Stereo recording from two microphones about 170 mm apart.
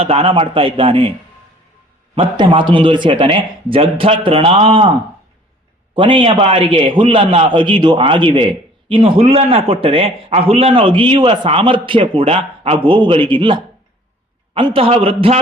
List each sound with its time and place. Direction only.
0.0 s a man's voice: 35° right (ahead or behind)
2.1 s a man's voice: 25° right (ahead or behind)
5.9 s a man's voice: 30° right (ahead or behind)